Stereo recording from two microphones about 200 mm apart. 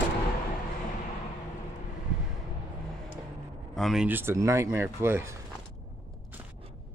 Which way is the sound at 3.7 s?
Centre (ahead or behind).